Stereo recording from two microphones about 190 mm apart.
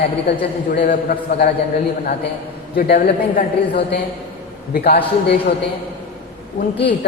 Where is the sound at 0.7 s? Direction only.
60° left (ahead or behind).